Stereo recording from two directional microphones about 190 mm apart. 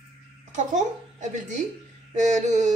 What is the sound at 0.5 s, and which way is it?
A woman's voice, 40° right (ahead or behind).